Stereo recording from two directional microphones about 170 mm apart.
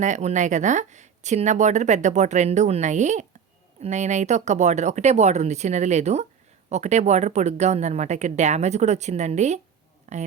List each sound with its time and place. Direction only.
0.0 s speech: 45° right (ahead or behind)